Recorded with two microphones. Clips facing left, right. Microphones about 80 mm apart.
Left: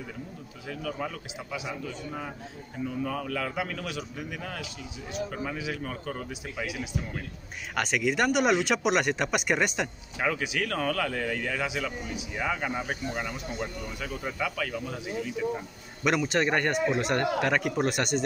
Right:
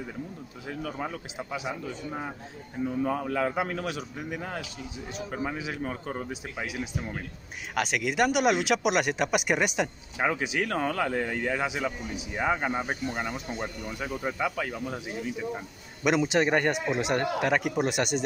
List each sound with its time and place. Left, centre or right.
0.7 s speech: right
7.7 s speech: centre
10.1 s speech: right
16.3 s speech: centre